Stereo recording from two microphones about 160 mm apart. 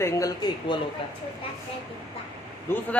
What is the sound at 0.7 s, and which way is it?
Speech, 30° left (ahead or behind).